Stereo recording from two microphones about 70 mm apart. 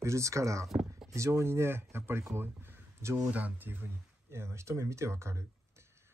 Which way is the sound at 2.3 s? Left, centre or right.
Right.